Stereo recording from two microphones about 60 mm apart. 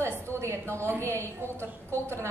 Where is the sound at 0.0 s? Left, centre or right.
Right.